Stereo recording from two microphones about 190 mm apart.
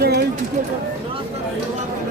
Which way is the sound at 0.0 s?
60° right (ahead or behind).